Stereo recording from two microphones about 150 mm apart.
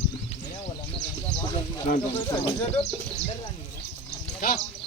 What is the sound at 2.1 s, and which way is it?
Speech, 15° left (ahead or behind).